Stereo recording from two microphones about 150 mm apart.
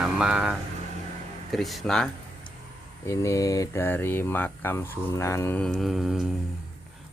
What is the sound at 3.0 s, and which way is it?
Speech, 20° left (ahead or behind).